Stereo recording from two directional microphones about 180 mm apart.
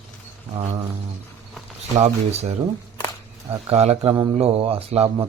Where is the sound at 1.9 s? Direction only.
35° right (ahead or behind).